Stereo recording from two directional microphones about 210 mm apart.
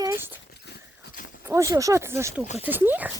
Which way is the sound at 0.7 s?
40° left (ahead or behind).